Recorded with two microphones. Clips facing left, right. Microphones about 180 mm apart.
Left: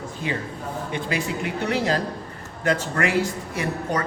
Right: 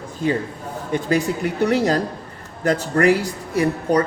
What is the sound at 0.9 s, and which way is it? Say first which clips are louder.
A man's voice: right 8 dB; 40° right (ahead or behind).